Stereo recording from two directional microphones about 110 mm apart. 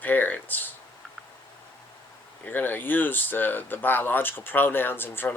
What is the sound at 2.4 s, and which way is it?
Speech, 15° left (ahead or behind).